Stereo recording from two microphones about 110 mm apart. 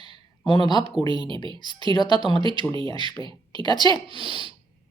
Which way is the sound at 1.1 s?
45° right (ahead or behind).